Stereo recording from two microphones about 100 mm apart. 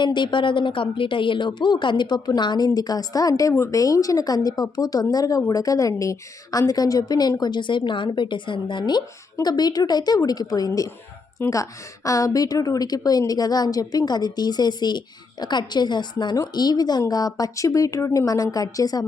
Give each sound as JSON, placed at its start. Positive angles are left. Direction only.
{"t": 0.0, "sound": "a woman's voice", "side_deg": 50}